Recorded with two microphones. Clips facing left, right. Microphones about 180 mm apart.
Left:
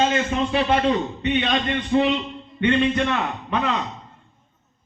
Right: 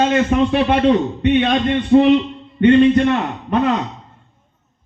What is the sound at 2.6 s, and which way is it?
Speech, 40° right (ahead or behind).